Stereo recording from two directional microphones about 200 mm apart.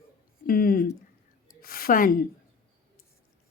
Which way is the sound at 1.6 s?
50° left (ahead or behind).